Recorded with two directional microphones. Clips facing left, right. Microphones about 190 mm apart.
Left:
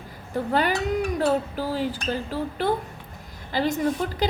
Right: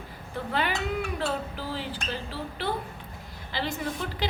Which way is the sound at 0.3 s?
40° left (ahead or behind).